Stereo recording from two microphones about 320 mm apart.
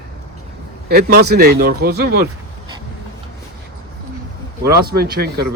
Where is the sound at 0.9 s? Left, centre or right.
Right.